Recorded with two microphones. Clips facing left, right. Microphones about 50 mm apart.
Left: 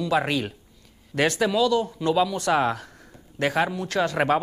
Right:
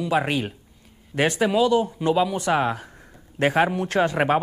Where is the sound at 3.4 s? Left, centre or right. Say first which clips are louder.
Right 3 dB; right.